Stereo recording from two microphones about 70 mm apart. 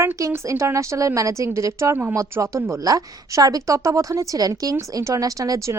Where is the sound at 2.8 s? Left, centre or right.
Right.